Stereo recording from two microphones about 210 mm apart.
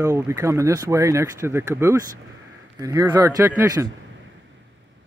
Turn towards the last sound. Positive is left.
turn(degrees=-15)  # may be behind; listen again after turning